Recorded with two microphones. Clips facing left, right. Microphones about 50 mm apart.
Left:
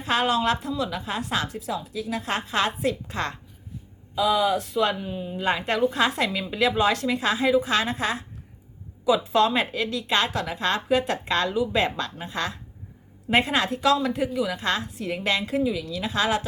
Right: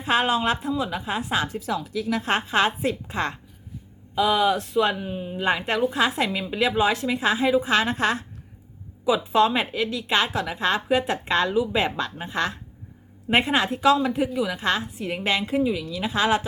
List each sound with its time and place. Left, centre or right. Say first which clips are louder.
0.0 s a woman's voice: right 1 dB; centre
1.5 s speech: right 3 dB; right
2.2 s a woman's voice: right 3 dB; right
4.1 s speech: right 1 dB; right
4.8 s a woman's voice: right 1 dB; right
7.9 s speech: right 3 dB; right
9.0 s a woman's voice: right 1 dB; centre
12.1 s a woman's voice: right 3 dB; right